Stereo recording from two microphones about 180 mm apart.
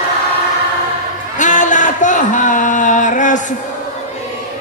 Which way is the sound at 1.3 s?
45° left (ahead or behind).